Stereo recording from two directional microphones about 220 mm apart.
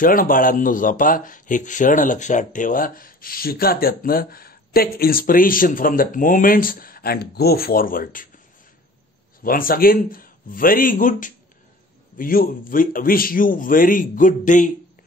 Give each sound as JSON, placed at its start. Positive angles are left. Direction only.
{"t": 0.0, "sound": "speech", "side_deg": 40}
{"t": 9.4, "sound": "speech", "side_deg": 40}